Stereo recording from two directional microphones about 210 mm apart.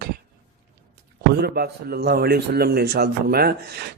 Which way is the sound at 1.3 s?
50° right (ahead or behind).